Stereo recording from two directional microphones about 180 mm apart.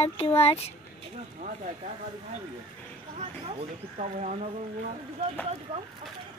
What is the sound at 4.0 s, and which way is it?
Speech, 40° right (ahead or behind).